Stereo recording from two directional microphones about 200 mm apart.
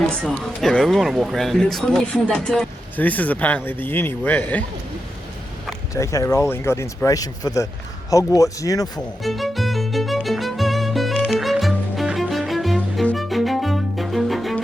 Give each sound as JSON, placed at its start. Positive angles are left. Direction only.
{"t": 0.6, "sound": "speech", "side_deg": 0}
{"t": 5.9, "sound": "speech", "side_deg": 15}
{"t": 9.0, "sound": "music", "side_deg": 0}